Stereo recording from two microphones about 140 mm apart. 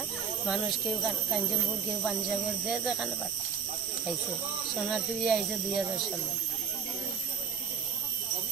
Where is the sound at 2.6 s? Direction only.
5° right (ahead or behind).